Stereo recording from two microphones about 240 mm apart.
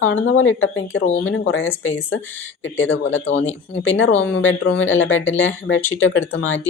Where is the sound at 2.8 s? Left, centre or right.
Left.